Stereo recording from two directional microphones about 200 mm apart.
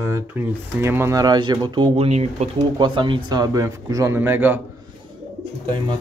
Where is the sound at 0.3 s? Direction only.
10° right (ahead or behind).